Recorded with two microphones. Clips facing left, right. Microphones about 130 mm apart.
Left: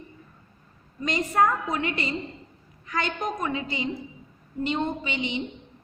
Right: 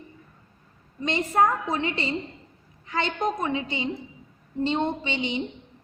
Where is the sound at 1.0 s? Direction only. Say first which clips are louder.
Right 1 dB; 25° right (ahead or behind).